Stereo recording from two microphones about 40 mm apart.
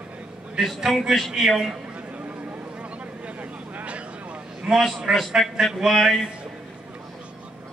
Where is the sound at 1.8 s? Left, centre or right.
Right.